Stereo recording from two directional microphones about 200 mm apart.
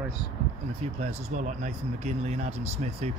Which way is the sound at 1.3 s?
35° right (ahead or behind).